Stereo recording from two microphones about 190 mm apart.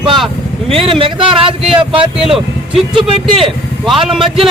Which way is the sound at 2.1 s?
Centre (ahead or behind).